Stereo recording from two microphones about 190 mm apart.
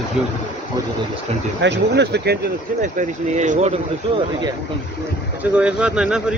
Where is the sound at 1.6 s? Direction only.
65° right (ahead or behind).